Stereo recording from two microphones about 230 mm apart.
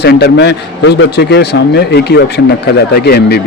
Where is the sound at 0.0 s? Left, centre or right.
Left.